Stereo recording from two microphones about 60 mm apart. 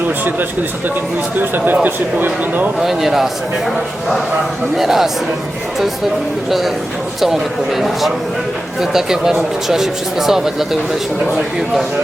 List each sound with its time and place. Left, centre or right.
1.4 s speech: right
2.8 s speech: centre
4.8 s speech: centre
7.8 s speech: centre